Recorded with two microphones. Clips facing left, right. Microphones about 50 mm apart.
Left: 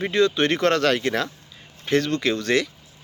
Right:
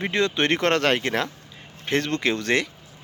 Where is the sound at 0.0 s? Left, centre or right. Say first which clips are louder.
Left 3 dB; right.